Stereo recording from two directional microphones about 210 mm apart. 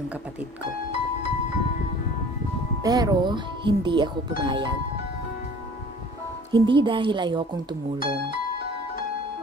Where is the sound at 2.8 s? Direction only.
15° right (ahead or behind).